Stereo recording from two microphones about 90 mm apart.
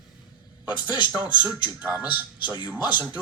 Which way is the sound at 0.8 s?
55° left (ahead or behind).